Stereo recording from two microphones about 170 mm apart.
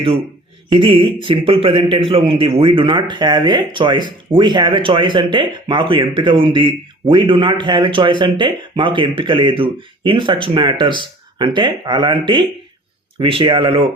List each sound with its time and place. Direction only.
0.7 s a man's voice: 30° right (ahead or behind)